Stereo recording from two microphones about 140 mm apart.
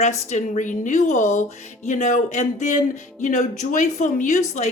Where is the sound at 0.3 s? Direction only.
55° left (ahead or behind).